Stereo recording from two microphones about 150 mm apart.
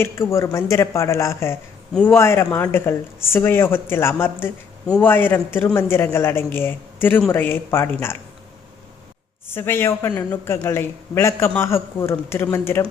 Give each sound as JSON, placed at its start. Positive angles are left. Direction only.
{"t": 0.0, "sound": "speech", "side_deg": 15}
{"t": 1.9, "sound": "a man's voice", "side_deg": 5}
{"t": 2.1, "sound": "speech", "side_deg": 15}
{"t": 9.6, "sound": "speech", "side_deg": 15}